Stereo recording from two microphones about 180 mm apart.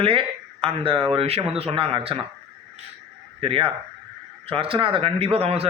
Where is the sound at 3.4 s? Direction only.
30° right (ahead or behind).